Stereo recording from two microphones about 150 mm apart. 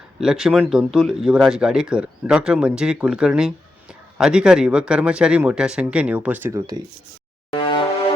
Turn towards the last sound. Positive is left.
turn(degrees=30)  # may be behind; listen again after turning